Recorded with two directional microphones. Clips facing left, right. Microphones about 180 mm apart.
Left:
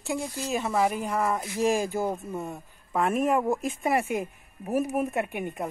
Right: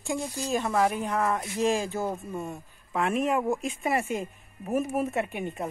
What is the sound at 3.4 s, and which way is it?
Speech, centre (ahead or behind).